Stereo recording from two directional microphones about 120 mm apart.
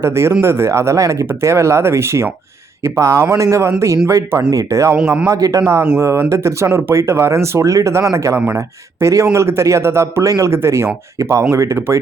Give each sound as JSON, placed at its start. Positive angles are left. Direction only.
{"t": 0.0, "sound": "speech", "side_deg": -20}